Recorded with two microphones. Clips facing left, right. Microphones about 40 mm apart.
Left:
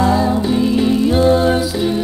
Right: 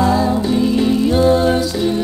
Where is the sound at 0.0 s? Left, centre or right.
Centre.